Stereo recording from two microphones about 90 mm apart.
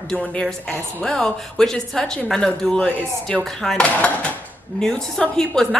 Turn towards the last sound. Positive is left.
turn(degrees=5)  # may be behind; listen again after turning